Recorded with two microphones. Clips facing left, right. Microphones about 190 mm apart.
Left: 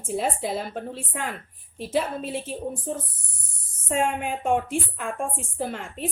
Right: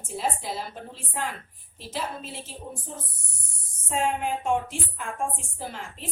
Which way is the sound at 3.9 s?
55° left (ahead or behind).